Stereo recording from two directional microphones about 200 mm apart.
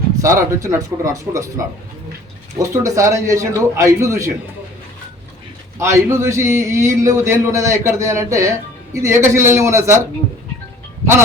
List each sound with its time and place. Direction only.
0.2 s a man's voice: 15° right (ahead or behind)
5.8 s a man's voice: 15° right (ahead or behind)